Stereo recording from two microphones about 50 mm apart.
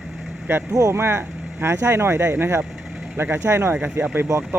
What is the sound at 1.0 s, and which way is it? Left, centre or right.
Speech, right.